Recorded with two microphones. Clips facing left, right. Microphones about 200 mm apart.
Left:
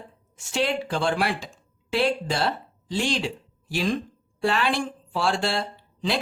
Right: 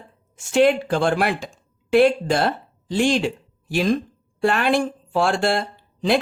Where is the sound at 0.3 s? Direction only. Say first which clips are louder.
Right 9 dB; 50° right (ahead or behind).